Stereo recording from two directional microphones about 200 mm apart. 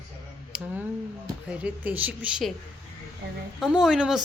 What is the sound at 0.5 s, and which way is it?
A woman's voice, 5° right (ahead or behind).